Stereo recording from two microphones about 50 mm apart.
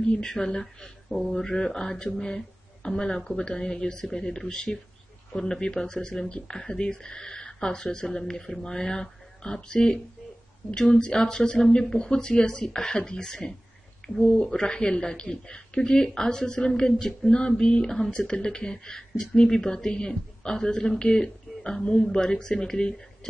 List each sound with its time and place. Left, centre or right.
0.0 s speech: centre